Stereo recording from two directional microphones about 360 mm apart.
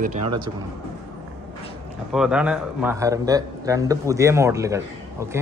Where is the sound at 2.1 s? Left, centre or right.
Centre.